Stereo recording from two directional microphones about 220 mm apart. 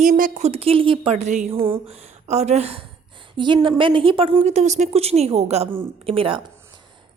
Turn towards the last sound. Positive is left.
turn(degrees=-25)  # may be behind; listen again after turning